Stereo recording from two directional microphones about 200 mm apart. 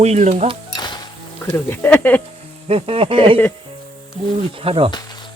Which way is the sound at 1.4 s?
10° left (ahead or behind).